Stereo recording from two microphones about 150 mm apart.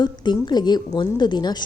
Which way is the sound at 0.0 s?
30° left (ahead or behind).